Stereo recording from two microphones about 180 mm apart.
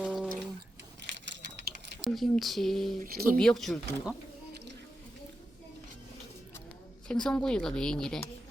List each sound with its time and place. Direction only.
0.0 s a sound: 5° right (ahead or behind)
2.0 s speech: centre (ahead or behind)
3.0 s speech: 55° right (ahead or behind)
3.3 s speech: centre (ahead or behind)
7.1 s speech: 5° left (ahead or behind)